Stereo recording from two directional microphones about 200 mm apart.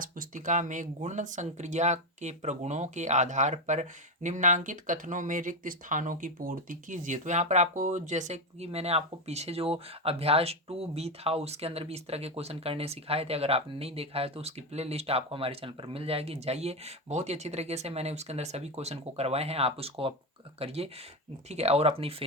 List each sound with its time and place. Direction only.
0.0 s speech: 40° right (ahead or behind)